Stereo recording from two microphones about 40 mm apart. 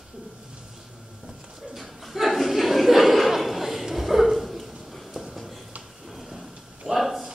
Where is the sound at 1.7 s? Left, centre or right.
Centre.